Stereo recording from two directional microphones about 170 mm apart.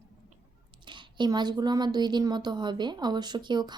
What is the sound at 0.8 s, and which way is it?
Speech, 25° right (ahead or behind).